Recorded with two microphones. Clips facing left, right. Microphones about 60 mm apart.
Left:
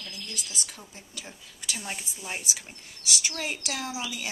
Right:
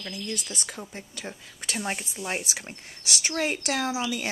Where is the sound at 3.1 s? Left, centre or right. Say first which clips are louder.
Right 4 dB; right.